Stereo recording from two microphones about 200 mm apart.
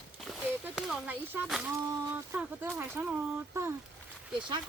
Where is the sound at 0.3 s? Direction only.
Centre (ahead or behind).